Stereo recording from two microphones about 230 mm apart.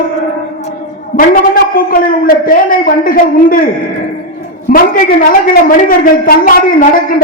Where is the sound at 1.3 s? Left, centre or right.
Left.